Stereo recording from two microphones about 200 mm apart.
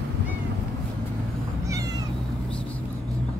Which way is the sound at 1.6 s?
15° right (ahead or behind).